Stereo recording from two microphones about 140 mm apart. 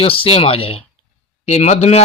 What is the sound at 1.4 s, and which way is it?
Speech, 55° left (ahead or behind).